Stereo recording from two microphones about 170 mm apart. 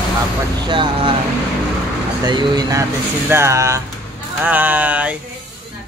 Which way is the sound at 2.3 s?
25° right (ahead or behind).